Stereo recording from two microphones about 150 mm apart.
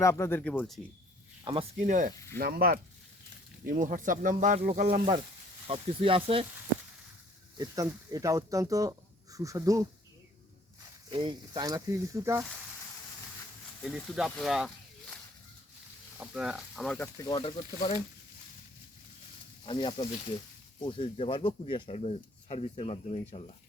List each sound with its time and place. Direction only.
0.0 s speech: 20° left (ahead or behind)
1.5 s speech: 30° right (ahead or behind)
1.8 s speech: 60° right (ahead or behind)
2.4 s speech: 90° right
3.7 s speech: 60° right (ahead or behind)
5.6 s speech: 40° right (ahead or behind)
7.6 s speech: 20° right (ahead or behind)
11.1 s speech: 30° right (ahead or behind)
13.8 s speech: centre (ahead or behind)
16.2 s speech: 5° right (ahead or behind)
17.0 s speech: 25° left (ahead or behind)
17.3 s speech: 35° left (ahead or behind)
17.7 s speech: 55° left (ahead or behind)
19.6 s speech: 35° left (ahead or behind)